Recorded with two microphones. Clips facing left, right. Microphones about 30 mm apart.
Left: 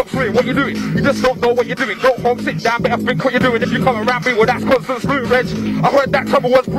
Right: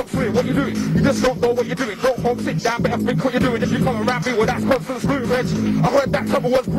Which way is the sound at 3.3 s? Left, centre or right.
Left.